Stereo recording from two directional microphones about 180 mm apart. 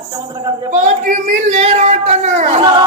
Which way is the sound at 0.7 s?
45° right (ahead or behind).